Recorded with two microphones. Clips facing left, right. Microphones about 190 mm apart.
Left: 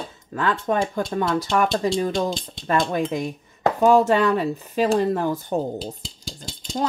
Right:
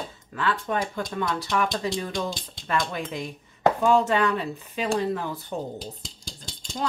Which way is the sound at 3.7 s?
40° left (ahead or behind).